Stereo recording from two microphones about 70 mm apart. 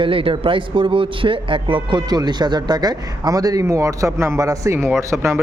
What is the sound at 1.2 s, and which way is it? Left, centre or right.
Speech, right.